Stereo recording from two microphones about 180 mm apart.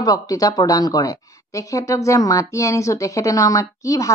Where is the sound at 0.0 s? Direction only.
20° left (ahead or behind).